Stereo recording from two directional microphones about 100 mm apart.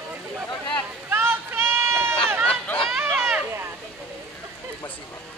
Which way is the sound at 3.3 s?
20° right (ahead or behind).